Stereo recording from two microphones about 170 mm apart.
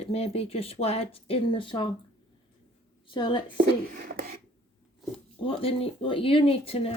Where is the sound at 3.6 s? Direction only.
60° right (ahead or behind).